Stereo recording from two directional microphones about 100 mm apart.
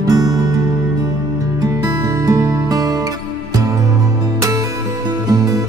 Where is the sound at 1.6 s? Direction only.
40° right (ahead or behind).